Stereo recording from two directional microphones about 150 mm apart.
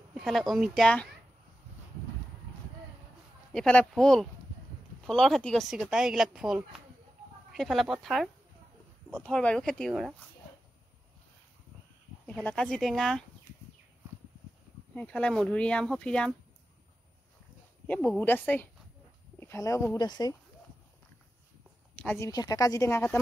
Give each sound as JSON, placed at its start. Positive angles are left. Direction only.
{"t": 0.1, "sound": "speech", "side_deg": 0}
{"t": 3.5, "sound": "speech", "side_deg": 5}
{"t": 12.3, "sound": "speech", "side_deg": 5}
{"t": 15.0, "sound": "speech", "side_deg": 10}
{"t": 17.8, "sound": "a woman's voice", "side_deg": 10}
{"t": 22.0, "sound": "a woman's voice", "side_deg": 20}